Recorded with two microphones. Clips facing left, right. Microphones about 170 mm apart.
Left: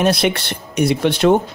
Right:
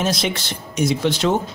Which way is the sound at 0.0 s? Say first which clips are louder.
Left 6 dB; 60° left (ahead or behind).